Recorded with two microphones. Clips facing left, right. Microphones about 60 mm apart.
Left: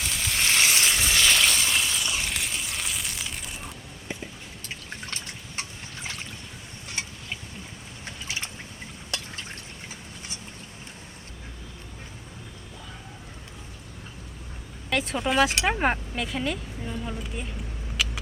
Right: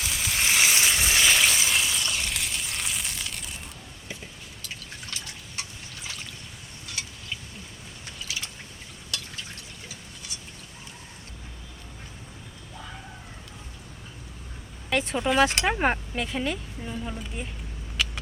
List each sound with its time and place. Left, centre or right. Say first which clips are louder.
0.0 s sizzle: even; centre
1.1 s a sound: even; centre
5.1 s water: left 2 dB; left
7.0 s a sound: left 3 dB; left
8.2 s drip: left 1 dB; left
14.8 s speech: right 1 dB; centre
17.9 s vehicle: even; centre